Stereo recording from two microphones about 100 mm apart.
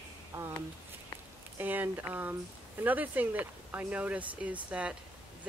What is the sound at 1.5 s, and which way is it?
Speech, 20° right (ahead or behind).